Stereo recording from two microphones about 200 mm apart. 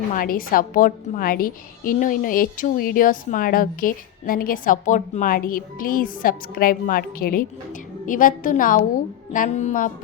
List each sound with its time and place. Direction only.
0.1 s a woman's voice: 45° left (ahead or behind)